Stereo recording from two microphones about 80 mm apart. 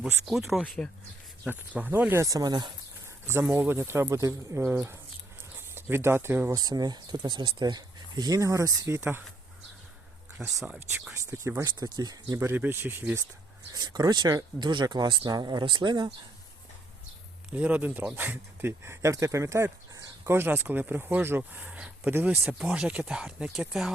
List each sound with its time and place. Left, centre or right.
0.3 s speech: centre
1.5 s speech: right
2.2 s speech: right
3.5 s speech: right
6.5 s speech: right
8.4 s speech: right
10.4 s speech: centre
11.3 s speech: right
11.8 s speech: right
12.4 s speech: right
13.7 s speech: right
15.3 s speech: right
17.5 s speech: centre; by 19.7 s right
20.2 s speech: right; by 23.9 s centre